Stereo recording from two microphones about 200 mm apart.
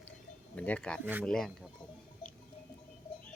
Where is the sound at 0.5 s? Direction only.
5° left (ahead or behind).